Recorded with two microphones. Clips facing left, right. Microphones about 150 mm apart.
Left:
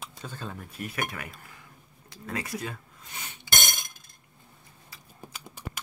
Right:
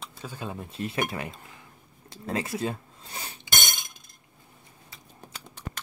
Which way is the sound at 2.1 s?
30° right (ahead or behind).